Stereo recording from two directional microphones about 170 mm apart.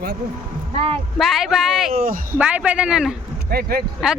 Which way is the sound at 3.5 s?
65° right (ahead or behind).